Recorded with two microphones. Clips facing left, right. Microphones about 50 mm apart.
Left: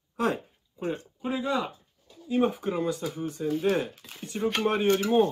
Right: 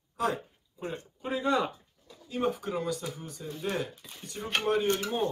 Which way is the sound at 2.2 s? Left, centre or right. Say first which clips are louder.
Left 5 dB; left.